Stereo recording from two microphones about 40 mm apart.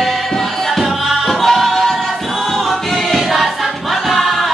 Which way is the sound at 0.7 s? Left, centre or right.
Centre.